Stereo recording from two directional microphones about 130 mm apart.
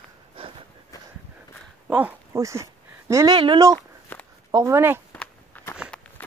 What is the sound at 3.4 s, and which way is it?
Speech, 40° right (ahead or behind).